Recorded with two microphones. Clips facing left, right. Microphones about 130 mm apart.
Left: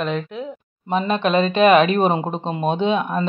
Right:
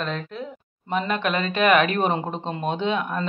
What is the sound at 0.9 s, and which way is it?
Speech, 20° left (ahead or behind).